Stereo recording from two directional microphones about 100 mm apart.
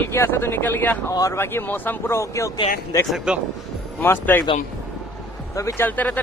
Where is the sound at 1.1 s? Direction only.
35° left (ahead or behind).